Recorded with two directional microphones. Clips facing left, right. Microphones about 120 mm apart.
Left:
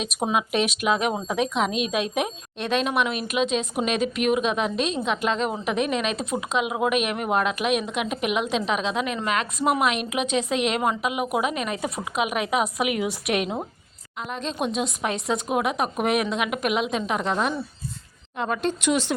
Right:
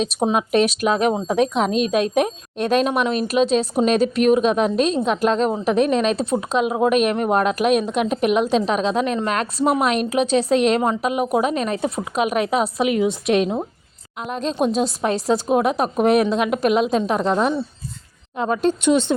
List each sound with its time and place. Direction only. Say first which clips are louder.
0.0 s a woman's voice: right 6 dB; 25° right (ahead or behind)
0.3 s a woman's voice: right 5 dB; 40° right (ahead or behind)
14.3 s speech: right 7 dB; 40° right (ahead or behind)
18.3 s a woman's voice: right 6 dB; 30° right (ahead or behind)